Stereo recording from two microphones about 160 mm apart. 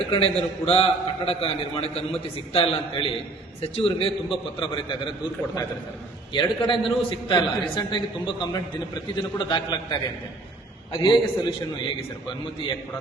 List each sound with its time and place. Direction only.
0.0 s a man's voice: 40° left (ahead or behind)
6.3 s a man's voice: 30° left (ahead or behind)